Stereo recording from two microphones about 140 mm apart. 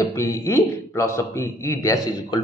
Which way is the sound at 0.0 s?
20° left (ahead or behind).